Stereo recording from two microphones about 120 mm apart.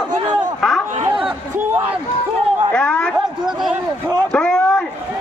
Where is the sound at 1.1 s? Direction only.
45° right (ahead or behind).